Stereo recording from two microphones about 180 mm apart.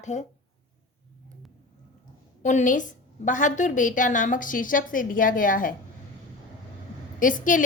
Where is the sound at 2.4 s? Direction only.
45° left (ahead or behind).